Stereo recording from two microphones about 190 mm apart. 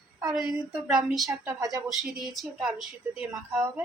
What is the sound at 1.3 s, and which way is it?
Speech, 15° right (ahead or behind).